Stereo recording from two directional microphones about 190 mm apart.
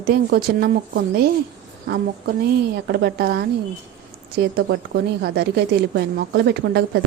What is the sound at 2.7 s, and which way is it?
Speech, 60° right (ahead or behind).